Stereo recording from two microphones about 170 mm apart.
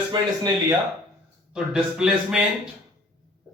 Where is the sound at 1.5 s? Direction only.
5° right (ahead or behind).